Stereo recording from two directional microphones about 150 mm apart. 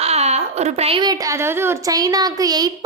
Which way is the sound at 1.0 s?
25° right (ahead or behind).